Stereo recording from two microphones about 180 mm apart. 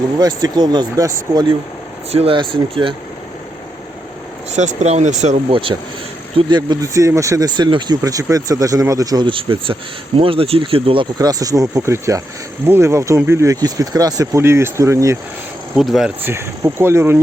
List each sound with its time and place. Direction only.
0.2 s speech: 20° right (ahead or behind)
4.5 s speech: 40° right (ahead or behind)
5.5 s speech: 30° right (ahead or behind)
15.7 s speech: centre (ahead or behind)
16.2 s speech: 15° right (ahead or behind)